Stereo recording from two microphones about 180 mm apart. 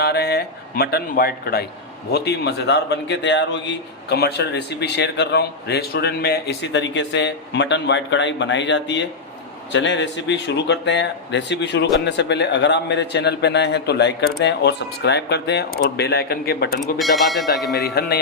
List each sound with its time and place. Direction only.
0.0 s a man's voice: 65° left (ahead or behind)
16.8 s speech: centre (ahead or behind)
17.7 s speech: 60° left (ahead or behind)